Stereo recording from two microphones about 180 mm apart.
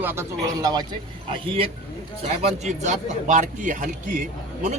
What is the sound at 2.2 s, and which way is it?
A man's voice, 40° right (ahead or behind).